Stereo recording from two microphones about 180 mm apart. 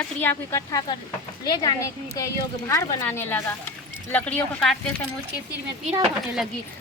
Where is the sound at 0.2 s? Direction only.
15° left (ahead or behind).